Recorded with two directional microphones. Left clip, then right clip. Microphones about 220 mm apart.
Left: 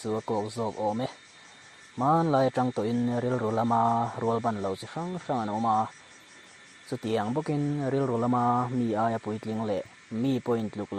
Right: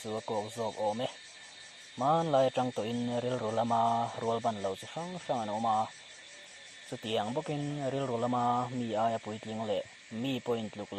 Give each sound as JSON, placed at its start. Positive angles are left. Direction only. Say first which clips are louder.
{"t": 0.0, "sound": "speech", "louder": "left 5 dB", "side_deg": 35}
{"t": 7.2, "sound": "speech", "louder": "left 3 dB", "side_deg": 35}